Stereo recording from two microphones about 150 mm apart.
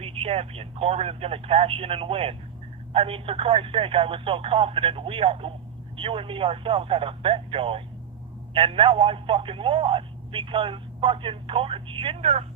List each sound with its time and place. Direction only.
0.0 s speech: 40° right (ahead or behind)